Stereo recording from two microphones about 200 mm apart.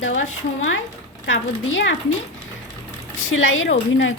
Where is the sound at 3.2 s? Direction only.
80° left.